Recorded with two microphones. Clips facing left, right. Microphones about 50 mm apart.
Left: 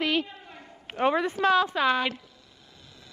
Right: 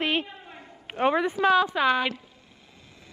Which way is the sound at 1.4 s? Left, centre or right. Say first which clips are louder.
Right 1 dB; centre.